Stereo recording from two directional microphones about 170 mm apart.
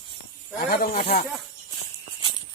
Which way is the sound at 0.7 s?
60° left (ahead or behind).